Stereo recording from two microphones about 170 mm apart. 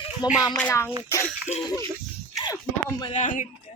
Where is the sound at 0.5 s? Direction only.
10° left (ahead or behind).